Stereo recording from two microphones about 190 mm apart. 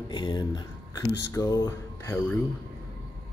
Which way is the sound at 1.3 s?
20° left (ahead or behind).